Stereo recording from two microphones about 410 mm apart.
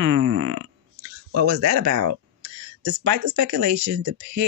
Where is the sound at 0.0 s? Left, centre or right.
Right.